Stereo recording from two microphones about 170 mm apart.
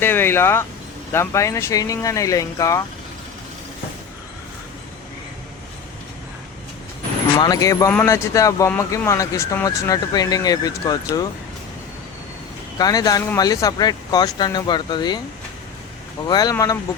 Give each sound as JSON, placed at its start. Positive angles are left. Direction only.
{"t": 0.0, "sound": "speech", "side_deg": 15}
{"t": 7.3, "sound": "speech", "side_deg": 25}
{"t": 12.8, "sound": "speech", "side_deg": 25}
{"t": 16.2, "sound": "speech", "side_deg": 25}